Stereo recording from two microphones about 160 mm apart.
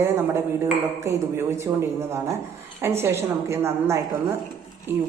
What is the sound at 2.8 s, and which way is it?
A woman's voice, 15° right (ahead or behind).